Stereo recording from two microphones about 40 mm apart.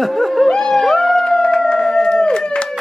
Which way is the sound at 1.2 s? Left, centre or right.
Left.